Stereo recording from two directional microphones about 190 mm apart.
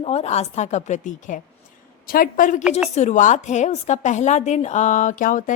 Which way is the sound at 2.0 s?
50° left (ahead or behind).